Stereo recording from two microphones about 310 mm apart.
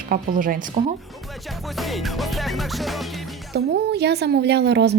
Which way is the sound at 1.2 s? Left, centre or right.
Centre.